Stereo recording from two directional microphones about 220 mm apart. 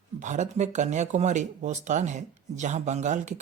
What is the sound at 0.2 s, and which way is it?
Speech, 35° right (ahead or behind).